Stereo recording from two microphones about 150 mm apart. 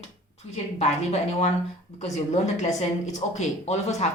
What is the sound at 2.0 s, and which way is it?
Speech, 50° left (ahead or behind).